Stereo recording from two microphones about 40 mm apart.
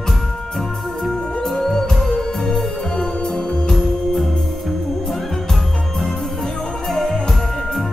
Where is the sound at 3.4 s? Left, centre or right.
Left.